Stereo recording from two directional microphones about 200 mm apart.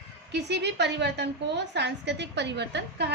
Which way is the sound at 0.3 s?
60° right (ahead or behind).